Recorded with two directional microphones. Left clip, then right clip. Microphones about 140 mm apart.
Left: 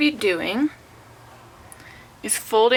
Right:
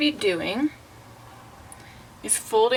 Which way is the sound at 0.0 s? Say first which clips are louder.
Left 2 dB; 25° left (ahead or behind).